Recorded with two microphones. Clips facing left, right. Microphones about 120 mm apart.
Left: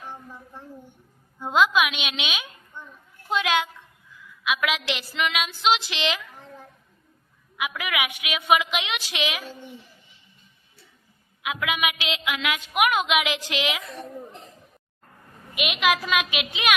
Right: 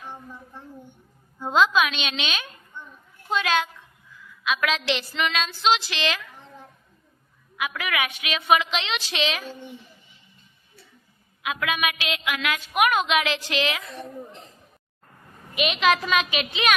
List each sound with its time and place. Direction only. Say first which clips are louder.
0.0 s child singing: even; centre (ahead or behind)
1.4 s a woman's voice: even; 10° left (ahead or behind)
7.5 s a woman's voice: right 1 dB; 15° left (ahead or behind)
11.4 s a woman's voice: even; 15° left (ahead or behind)
15.5 s a woman's voice: right 2 dB; 5° left (ahead or behind)